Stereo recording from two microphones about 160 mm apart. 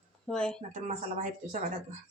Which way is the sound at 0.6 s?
45° right (ahead or behind).